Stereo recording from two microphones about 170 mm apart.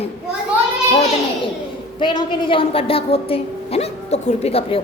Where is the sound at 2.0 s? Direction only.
25° left (ahead or behind).